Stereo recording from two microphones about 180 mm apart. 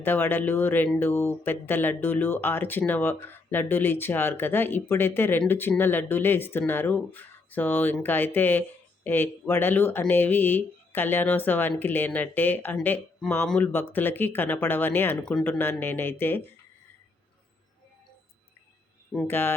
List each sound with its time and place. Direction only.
0.0 s speech: 10° left (ahead or behind)
19.1 s speech: 10° left (ahead or behind)